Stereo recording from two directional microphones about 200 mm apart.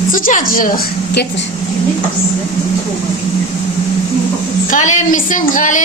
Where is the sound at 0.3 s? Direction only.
45° left (ahead or behind).